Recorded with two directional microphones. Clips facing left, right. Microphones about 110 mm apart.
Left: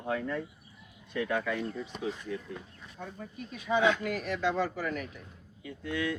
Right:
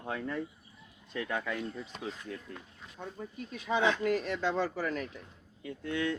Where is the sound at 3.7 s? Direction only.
30° right (ahead or behind).